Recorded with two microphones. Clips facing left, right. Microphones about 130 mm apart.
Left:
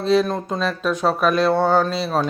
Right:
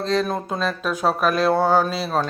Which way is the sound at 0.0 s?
5° left (ahead or behind).